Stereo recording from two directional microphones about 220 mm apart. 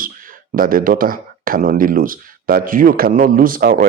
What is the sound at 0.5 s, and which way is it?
Speech, 40° right (ahead or behind).